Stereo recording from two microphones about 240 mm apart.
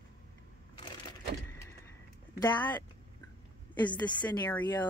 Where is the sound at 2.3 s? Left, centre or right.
Centre.